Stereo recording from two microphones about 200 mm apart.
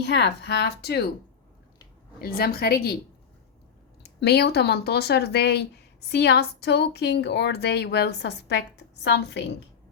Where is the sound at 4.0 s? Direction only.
55° left (ahead or behind).